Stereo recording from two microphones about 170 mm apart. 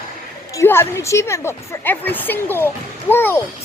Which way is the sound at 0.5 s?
15° left (ahead or behind).